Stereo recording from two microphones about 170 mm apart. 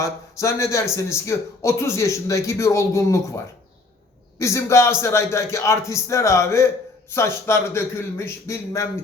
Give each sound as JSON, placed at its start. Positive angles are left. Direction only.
{"t": 0.0, "sound": "a man's voice", "side_deg": 15}